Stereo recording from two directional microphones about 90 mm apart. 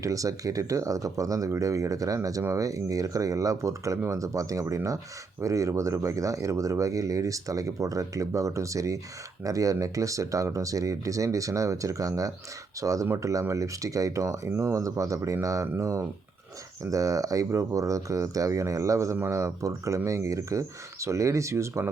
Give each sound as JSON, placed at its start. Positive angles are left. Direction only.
{"t": 0.0, "sound": "speech", "side_deg": -40}